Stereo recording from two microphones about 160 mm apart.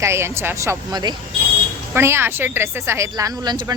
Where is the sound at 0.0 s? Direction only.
15° right (ahead or behind).